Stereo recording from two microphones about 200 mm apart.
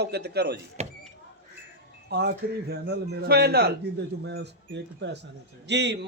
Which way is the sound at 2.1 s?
55° right (ahead or behind).